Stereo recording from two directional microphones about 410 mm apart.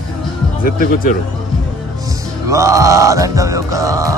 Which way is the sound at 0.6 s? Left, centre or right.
Left.